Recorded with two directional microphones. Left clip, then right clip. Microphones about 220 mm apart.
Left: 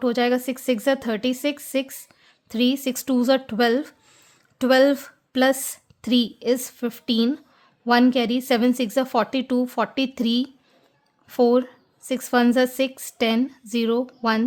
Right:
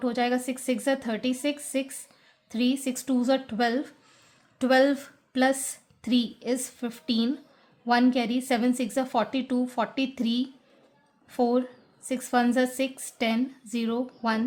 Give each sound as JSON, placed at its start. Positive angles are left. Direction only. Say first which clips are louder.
{"t": 0.0, "sound": "a woman's voice", "louder": "left 5 dB", "side_deg": 40}